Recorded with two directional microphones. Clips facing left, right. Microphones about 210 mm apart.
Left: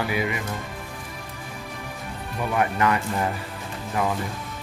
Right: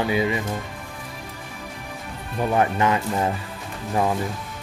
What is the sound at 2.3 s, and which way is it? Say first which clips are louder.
Speech: right 3 dB; 25° right (ahead or behind).